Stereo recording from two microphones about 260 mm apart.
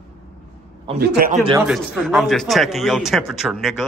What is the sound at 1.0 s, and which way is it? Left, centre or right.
Speech, right.